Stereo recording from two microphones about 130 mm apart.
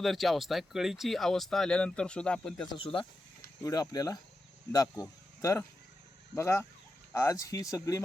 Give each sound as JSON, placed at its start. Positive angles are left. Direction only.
{"t": 0.0, "sound": "speech", "side_deg": 0}
{"t": 2.7, "sound": "speech", "side_deg": 40}
{"t": 3.6, "sound": "speech", "side_deg": 30}